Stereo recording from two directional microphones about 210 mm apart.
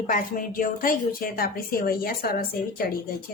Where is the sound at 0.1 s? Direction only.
40° left (ahead or behind).